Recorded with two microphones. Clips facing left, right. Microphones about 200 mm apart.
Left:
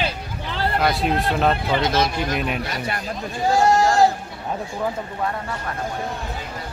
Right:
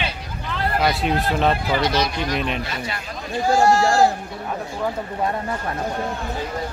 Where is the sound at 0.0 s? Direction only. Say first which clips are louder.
Left 2 dB; 30° left (ahead or behind).